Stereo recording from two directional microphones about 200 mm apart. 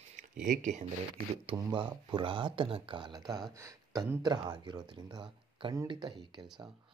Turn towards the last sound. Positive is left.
turn(degrees=-20)  # may be behind; listen again after turning